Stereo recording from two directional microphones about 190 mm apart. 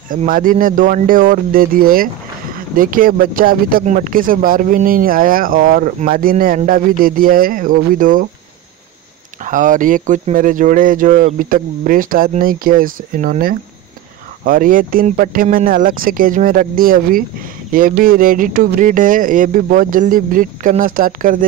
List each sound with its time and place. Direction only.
0.1 s speech: 45° right (ahead or behind)
9.4 s speech: 45° right (ahead or behind)